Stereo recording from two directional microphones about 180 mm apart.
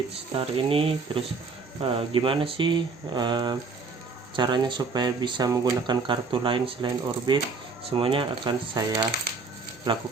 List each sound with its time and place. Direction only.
0.3 s speech: 30° right (ahead or behind)